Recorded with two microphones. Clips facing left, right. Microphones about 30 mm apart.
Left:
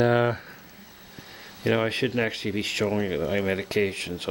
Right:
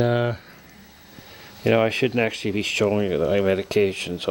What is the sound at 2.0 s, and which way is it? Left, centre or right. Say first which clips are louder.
Speech: right 4 dB; centre.